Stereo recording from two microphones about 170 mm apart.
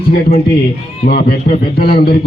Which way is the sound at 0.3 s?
65° left (ahead or behind).